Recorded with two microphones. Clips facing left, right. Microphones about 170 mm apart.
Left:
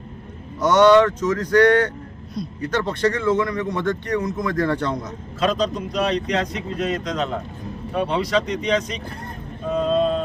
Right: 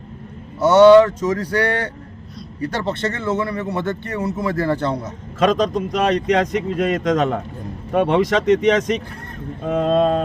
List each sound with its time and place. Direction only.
0.6 s speech: 10° right (ahead or behind)
5.4 s speech: 50° right (ahead or behind)
7.9 s speech: 60° right (ahead or behind)
9.6 s a sound: 55° right (ahead or behind)